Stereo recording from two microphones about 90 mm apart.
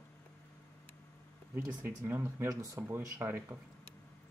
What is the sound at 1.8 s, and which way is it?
Speech, 25° right (ahead or behind).